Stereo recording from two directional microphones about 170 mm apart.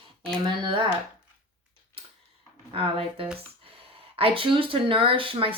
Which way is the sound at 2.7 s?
35° right (ahead or behind).